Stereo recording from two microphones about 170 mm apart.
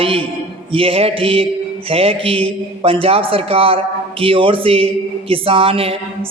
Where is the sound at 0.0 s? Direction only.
35° right (ahead or behind).